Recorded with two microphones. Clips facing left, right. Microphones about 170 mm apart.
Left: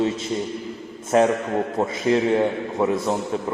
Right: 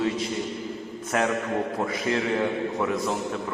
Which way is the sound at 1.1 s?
30° left (ahead or behind).